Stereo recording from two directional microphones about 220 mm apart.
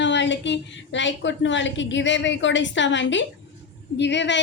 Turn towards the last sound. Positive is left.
turn(degrees=55)  # may be behind; listen again after turning